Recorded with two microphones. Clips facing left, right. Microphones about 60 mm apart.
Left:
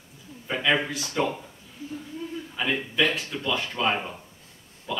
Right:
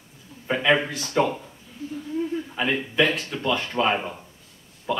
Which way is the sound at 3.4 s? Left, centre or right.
Right.